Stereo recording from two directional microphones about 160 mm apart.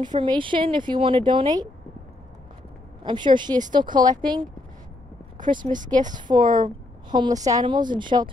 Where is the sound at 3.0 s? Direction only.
30° right (ahead or behind).